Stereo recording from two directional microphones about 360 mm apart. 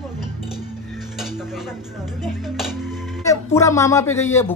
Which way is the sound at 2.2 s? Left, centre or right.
Centre.